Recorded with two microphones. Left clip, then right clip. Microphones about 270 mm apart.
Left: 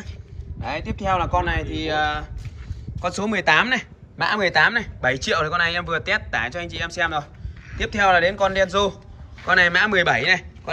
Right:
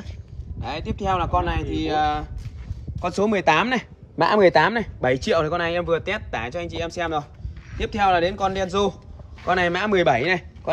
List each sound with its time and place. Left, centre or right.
0.6 s speech: centre